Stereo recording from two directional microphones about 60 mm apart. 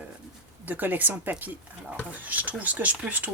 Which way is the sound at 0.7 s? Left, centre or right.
Right.